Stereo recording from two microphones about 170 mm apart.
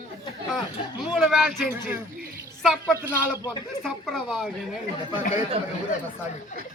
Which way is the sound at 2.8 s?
20° left (ahead or behind).